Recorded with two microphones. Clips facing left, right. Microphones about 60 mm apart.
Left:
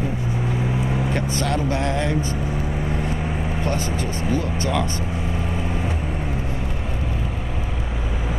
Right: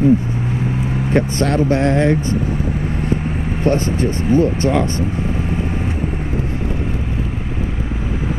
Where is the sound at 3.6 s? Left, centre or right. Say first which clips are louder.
Right 11 dB; right.